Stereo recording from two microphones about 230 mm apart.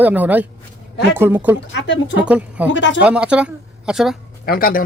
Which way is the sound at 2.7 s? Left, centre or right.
Left.